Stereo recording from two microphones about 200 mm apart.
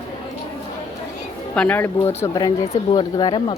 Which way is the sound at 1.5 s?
5° left (ahead or behind).